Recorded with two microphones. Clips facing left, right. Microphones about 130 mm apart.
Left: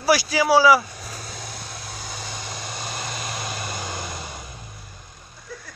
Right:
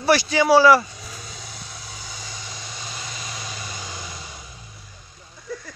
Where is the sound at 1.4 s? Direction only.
55° left (ahead or behind).